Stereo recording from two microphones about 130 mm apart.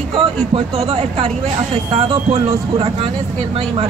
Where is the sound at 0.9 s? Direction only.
45° right (ahead or behind).